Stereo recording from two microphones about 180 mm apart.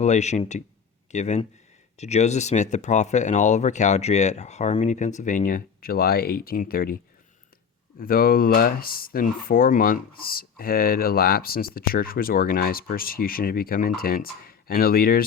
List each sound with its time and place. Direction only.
0.0 s speech: 40° left (ahead or behind); by 15.2 s 55° left (ahead or behind)